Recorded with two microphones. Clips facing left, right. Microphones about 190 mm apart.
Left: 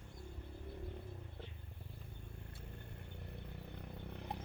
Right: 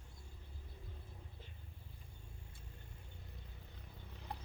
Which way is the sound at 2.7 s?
65° left (ahead or behind).